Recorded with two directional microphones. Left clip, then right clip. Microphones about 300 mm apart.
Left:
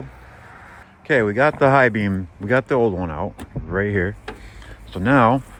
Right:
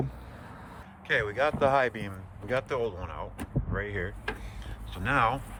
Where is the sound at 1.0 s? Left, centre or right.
Centre.